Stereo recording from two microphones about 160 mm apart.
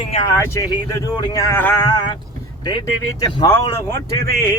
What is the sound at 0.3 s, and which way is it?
Speech, 15° left (ahead or behind).